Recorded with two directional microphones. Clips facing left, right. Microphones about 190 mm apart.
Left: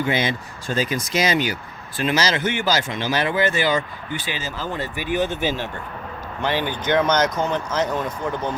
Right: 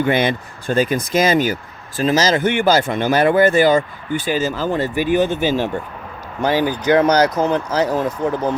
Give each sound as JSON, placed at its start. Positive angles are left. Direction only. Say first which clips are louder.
{"t": 0.0, "sound": "speech", "louder": "right 5 dB", "side_deg": -55}